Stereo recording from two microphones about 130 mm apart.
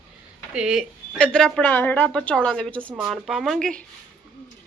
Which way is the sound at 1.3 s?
5° left (ahead or behind).